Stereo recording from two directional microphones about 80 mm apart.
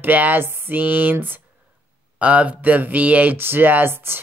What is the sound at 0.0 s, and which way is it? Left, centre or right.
Speech, right.